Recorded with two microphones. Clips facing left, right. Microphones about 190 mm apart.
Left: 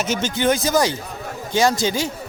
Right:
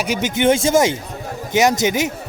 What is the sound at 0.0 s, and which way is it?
A man's voice, 15° right (ahead or behind).